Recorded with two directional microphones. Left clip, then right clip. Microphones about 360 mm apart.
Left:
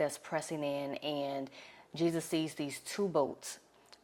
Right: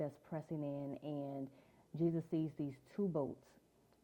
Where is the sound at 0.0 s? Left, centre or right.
Centre.